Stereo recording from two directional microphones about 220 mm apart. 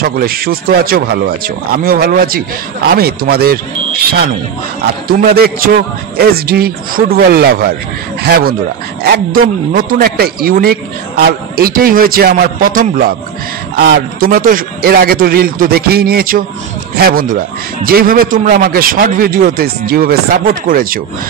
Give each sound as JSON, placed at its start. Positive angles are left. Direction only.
{"t": 0.0, "sound": "a man's voice", "side_deg": -45}